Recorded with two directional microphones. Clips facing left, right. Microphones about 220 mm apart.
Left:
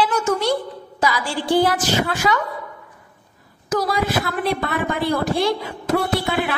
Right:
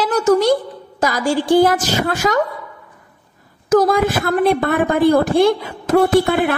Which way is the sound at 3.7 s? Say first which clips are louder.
Right 7 dB; 50° right (ahead or behind).